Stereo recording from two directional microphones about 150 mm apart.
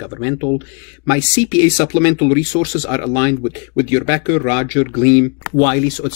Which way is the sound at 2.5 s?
40° left (ahead or behind).